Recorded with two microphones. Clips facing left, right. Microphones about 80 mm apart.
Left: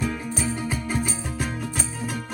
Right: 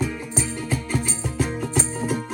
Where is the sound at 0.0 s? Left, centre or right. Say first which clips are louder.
Even; centre.